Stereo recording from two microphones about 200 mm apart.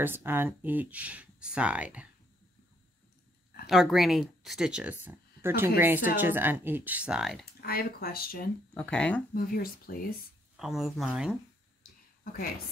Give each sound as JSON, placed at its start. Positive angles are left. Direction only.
{"t": 0.0, "sound": "speech", "side_deg": -10}
{"t": 3.6, "sound": "speech", "side_deg": 0}
{"t": 7.6, "sound": "speech", "side_deg": 50}
{"t": 8.7, "sound": "speech", "side_deg": 5}
{"t": 9.3, "sound": "speech", "side_deg": 45}
{"t": 10.6, "sound": "speech", "side_deg": 0}